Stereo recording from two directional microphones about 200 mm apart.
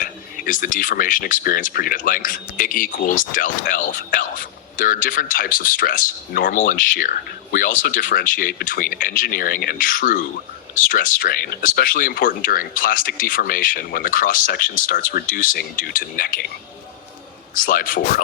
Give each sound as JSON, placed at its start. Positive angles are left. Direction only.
{"t": 0.0, "sound": "speech", "side_deg": 45}
{"t": 17.5, "sound": "speech", "side_deg": 45}